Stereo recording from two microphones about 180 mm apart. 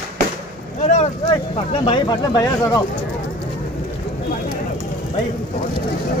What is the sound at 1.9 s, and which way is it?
Speech, 25° left (ahead or behind).